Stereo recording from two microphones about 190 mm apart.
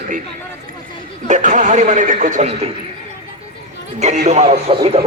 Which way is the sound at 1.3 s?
40° right (ahead or behind).